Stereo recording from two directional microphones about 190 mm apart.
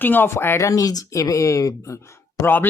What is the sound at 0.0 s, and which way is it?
Speech, 10° left (ahead or behind).